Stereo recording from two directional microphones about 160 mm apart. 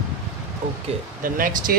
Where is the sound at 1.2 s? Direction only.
60° right (ahead or behind).